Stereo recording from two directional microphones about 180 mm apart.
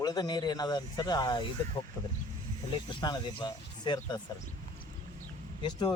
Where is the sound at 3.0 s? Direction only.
25° left (ahead or behind).